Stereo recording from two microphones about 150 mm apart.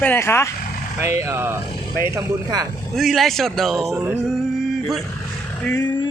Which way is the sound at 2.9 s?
Centre (ahead or behind).